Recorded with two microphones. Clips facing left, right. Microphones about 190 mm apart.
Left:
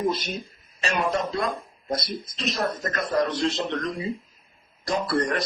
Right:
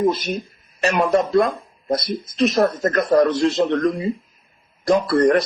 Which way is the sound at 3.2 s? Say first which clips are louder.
Right 8 dB; 60° right (ahead or behind).